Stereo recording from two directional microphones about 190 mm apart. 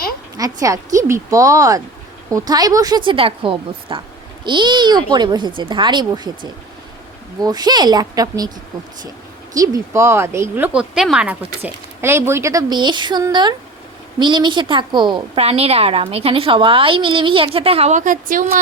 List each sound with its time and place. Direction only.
0.3 s a woman's voice: 20° right (ahead or behind)
7.4 s a woman's voice: 20° right (ahead or behind)
9.6 s a woman's voice: 15° right (ahead or behind); by 18.6 s 45° right (ahead or behind)